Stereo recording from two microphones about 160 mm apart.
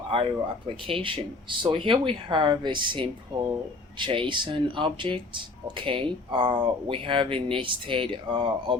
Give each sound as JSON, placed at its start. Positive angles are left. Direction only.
{"t": 0.1, "sound": "speech", "side_deg": -30}